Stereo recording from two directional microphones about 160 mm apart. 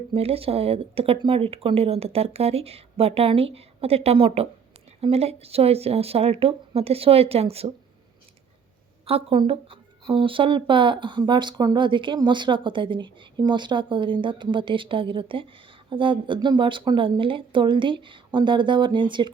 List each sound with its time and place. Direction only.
0.1 s speech: 35° right (ahead or behind)
9.0 s speech: 35° right (ahead or behind)